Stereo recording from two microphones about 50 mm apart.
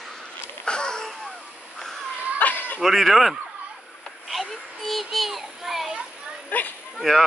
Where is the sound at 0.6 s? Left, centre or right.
Centre.